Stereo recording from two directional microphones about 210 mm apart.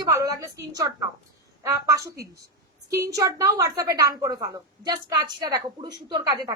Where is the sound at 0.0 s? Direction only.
15° right (ahead or behind).